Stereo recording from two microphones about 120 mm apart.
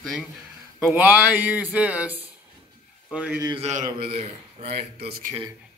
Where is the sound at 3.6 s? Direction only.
80° right.